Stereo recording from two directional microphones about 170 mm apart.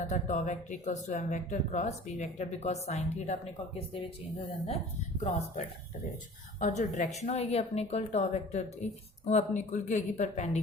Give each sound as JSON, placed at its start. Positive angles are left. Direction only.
{"t": 0.0, "sound": "speech", "side_deg": 45}
{"t": 6.6, "sound": "speech", "side_deg": 45}